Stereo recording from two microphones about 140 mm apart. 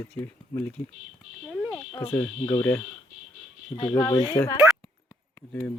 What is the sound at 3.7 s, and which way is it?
Speech, 30° left (ahead or behind).